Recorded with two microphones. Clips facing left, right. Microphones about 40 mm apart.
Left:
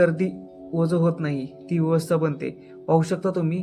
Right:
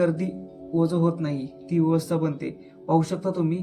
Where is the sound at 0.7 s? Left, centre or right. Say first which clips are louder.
Even; left.